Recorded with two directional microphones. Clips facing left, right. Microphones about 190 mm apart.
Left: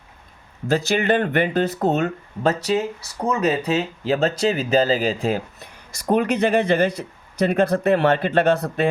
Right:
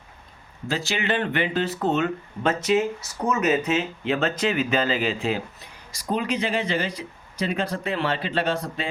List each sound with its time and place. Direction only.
0.7 s speech: 50° left (ahead or behind)
6.1 s speech: 60° left (ahead or behind)